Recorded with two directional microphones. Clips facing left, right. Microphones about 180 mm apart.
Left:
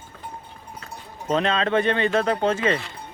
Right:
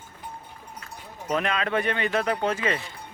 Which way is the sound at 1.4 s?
25° left (ahead or behind).